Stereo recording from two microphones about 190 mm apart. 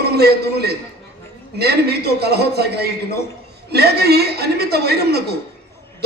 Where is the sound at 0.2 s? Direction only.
55° right (ahead or behind).